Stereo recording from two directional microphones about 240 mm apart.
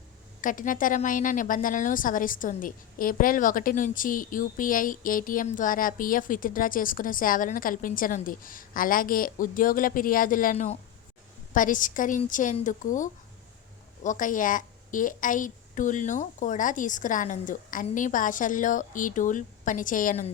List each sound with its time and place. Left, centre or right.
0.4 s a woman's voice: left